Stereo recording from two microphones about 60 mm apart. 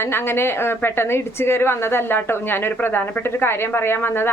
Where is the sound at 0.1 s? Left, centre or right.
Left.